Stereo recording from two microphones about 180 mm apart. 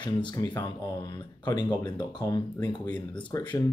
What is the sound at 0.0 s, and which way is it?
Speech, 25° left (ahead or behind).